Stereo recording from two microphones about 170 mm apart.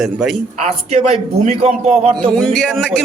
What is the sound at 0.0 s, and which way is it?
Speech, centre (ahead or behind).